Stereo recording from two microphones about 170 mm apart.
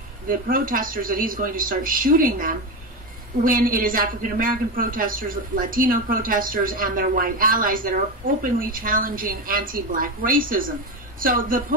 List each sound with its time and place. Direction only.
0.3 s a man's voice: 55° right (ahead or behind)